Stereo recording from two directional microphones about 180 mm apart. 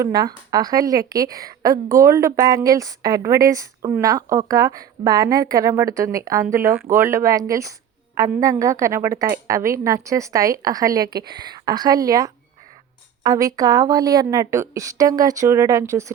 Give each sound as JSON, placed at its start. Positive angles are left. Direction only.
{"t": 0.0, "sound": "a woman's voice", "side_deg": -20}